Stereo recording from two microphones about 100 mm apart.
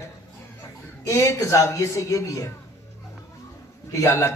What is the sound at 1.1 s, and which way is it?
A man's voice, 30° left (ahead or behind).